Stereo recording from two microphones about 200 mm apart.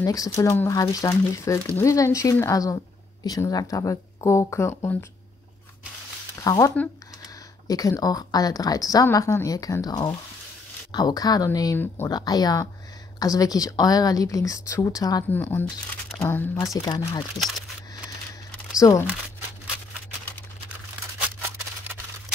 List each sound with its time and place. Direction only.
0.0 s a woman's voice: 15° left (ahead or behind)
6.4 s a woman's voice: 15° left (ahead or behind)
18.8 s a woman's voice: 15° left (ahead or behind)